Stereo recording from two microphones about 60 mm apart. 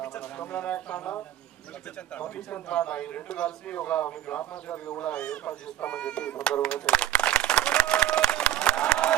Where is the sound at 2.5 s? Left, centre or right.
Left.